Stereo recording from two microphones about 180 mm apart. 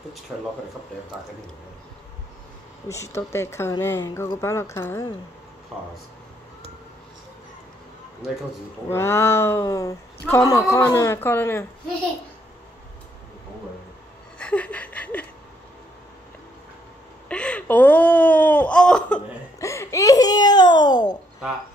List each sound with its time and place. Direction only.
0.3 s speech: 5° right (ahead or behind)
2.9 s speech: 15° left (ahead or behind)
8.8 s speech: 15° left (ahead or behind)
14.4 s a sound: 5° left (ahead or behind)
17.3 s a sound: 5° left (ahead or behind)
19.6 s babbling: 15° left (ahead or behind)